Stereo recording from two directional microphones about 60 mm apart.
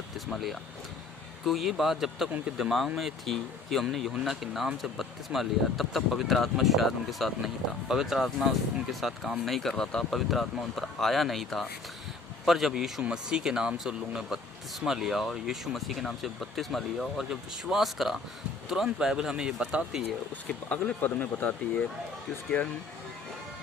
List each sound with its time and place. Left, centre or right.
0.3 s speech: centre
13.0 s speech: centre
17.2 s speech: centre
20.7 s speech: left